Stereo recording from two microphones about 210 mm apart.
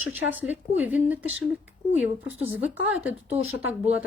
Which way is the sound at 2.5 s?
5° right (ahead or behind).